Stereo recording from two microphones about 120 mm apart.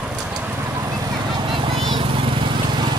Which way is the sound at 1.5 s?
45° right (ahead or behind).